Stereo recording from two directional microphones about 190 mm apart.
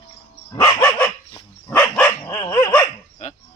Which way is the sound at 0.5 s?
20° left (ahead or behind).